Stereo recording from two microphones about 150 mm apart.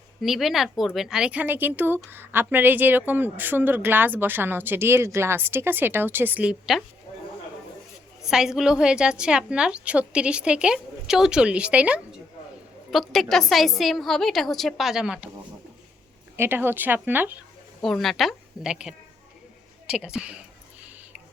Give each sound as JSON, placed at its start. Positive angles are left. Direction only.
{"t": 0.2, "sound": "a woman's voice", "side_deg": 0}
{"t": 8.2, "sound": "a woman's voice", "side_deg": -5}
{"t": 16.4, "sound": "speech", "side_deg": -15}
{"t": 17.8, "sound": "a woman's voice", "side_deg": 0}